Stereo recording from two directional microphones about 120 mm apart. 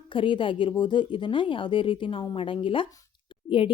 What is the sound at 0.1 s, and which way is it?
Speech, 45° left (ahead or behind).